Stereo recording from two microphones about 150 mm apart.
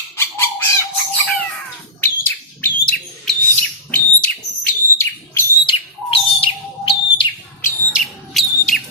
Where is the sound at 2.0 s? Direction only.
15° left (ahead or behind).